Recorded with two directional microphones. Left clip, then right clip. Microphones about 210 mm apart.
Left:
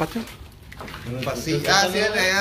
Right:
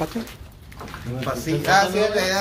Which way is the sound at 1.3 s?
45° right (ahead or behind).